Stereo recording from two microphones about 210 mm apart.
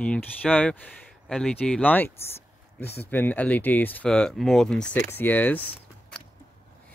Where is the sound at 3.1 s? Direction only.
10° left (ahead or behind).